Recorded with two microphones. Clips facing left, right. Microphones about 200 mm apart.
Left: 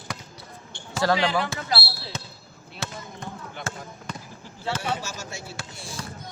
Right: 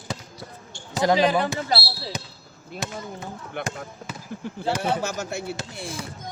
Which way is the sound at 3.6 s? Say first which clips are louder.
Right 6 dB; 60° right (ahead or behind).